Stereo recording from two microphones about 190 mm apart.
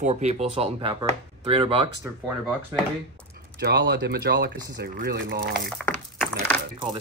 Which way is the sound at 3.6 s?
55° right (ahead or behind).